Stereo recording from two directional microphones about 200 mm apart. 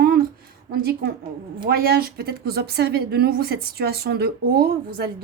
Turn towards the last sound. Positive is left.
turn(degrees=-50)  # may be behind; listen again after turning